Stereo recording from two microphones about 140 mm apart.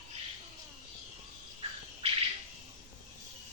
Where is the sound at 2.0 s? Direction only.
45° right (ahead or behind).